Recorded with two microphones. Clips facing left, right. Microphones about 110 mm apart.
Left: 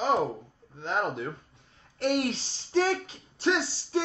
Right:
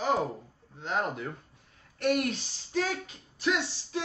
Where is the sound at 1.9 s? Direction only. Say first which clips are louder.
Left 1 dB; 25° left (ahead or behind).